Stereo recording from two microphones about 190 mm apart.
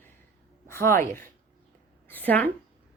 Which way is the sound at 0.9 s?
15° left (ahead or behind).